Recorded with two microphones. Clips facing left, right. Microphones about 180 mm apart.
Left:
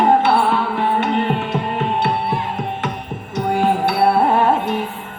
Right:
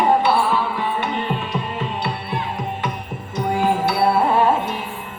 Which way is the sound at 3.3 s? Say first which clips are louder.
Left 2 dB; 60° left (ahead or behind).